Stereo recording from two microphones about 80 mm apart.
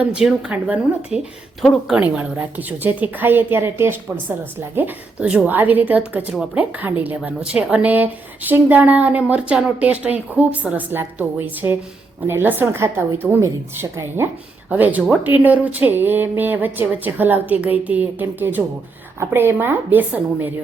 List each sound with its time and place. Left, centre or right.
0.0 s a woman's voice: centre
2.0 s a woman's voice: right
14.7 s a woman's voice: centre